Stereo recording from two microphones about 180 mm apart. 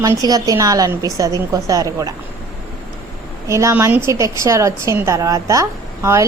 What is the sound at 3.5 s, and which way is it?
A woman's voice, 15° right (ahead or behind).